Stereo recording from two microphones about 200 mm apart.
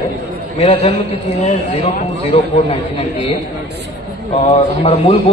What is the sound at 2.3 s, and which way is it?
Speech, 35° left (ahead or behind).